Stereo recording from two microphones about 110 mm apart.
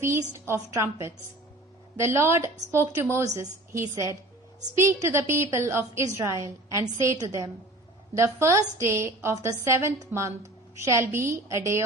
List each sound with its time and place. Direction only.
0.3 s a woman's voice: 25° right (ahead or behind)